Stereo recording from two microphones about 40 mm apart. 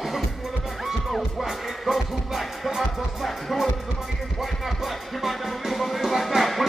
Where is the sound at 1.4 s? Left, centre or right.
Centre.